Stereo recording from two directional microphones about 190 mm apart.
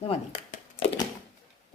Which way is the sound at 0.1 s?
30° left (ahead or behind).